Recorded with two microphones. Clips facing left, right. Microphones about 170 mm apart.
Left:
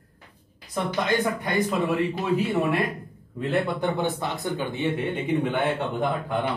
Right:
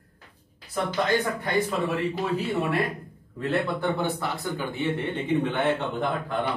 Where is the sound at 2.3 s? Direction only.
20° left (ahead or behind).